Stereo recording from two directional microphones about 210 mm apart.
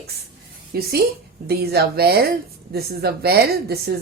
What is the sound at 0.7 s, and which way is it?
A woman's voice, 45° right (ahead or behind).